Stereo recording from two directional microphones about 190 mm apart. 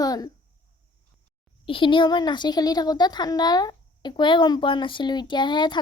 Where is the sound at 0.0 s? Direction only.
20° left (ahead or behind).